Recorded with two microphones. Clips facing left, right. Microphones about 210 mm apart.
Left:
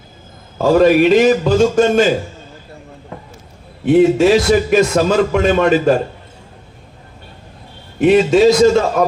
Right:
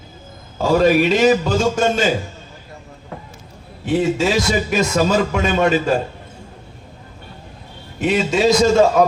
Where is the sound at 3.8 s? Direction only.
55° left (ahead or behind).